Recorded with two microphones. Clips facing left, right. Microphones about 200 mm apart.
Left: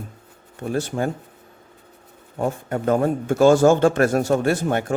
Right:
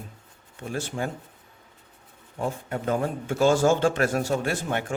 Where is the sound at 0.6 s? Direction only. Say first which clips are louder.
Left 7 dB; 45° left (ahead or behind).